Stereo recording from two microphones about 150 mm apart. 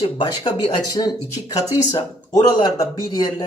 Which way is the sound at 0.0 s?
35° left (ahead or behind).